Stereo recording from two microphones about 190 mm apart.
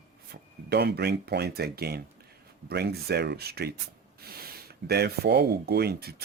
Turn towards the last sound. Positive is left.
turn(degrees=-55)  # may be behind; listen again after turning